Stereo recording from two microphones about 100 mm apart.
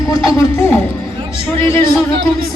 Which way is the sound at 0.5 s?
30° left (ahead or behind).